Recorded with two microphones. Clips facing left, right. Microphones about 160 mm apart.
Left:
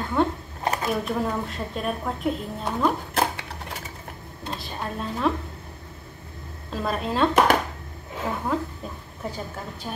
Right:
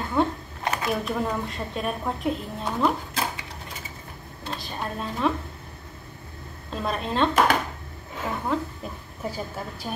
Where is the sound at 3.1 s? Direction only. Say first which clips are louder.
Left 5 dB; 65° left (ahead or behind).